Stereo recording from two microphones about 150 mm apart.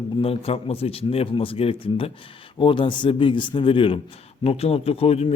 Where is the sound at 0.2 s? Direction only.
40° left (ahead or behind).